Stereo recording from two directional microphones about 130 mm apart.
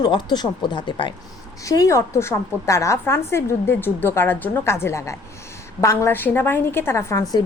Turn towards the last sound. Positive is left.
turn(degrees=25)  # may be behind; listen again after turning